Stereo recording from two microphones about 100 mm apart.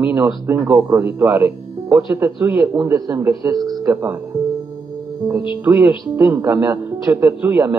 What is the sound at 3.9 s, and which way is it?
Speech, 25° right (ahead or behind).